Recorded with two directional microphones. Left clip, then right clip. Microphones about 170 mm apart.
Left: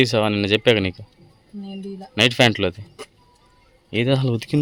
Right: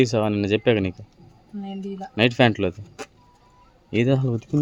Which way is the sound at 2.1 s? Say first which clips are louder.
Left 3 dB; 5° left (ahead or behind).